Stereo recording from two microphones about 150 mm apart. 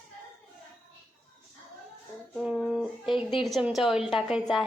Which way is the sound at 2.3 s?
5° right (ahead or behind).